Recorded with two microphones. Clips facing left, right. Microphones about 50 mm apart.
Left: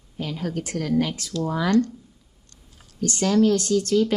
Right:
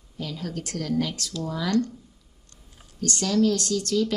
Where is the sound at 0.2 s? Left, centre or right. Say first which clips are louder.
Left 4 dB; left.